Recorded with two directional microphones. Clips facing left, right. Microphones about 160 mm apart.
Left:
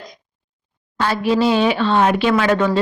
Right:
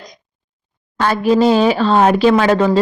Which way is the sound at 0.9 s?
50° right (ahead or behind).